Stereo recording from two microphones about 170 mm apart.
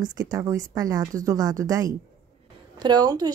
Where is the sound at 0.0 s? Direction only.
20° right (ahead or behind).